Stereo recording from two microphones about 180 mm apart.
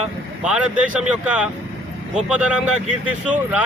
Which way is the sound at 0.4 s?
5° right (ahead or behind).